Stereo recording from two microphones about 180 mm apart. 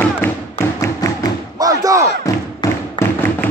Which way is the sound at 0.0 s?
10° left (ahead or behind).